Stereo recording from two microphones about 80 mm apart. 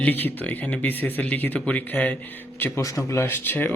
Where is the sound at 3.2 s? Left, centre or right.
Left.